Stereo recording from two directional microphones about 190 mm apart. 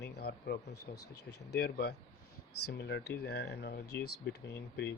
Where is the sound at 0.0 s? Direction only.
60° left (ahead or behind).